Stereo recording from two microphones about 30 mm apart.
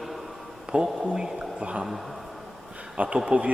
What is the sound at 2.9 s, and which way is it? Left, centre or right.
Speech, right.